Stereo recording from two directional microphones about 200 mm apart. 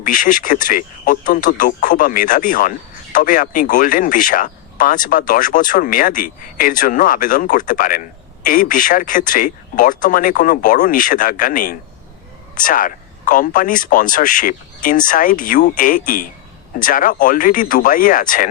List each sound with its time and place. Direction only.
0.0 s speech: 40° left (ahead or behind)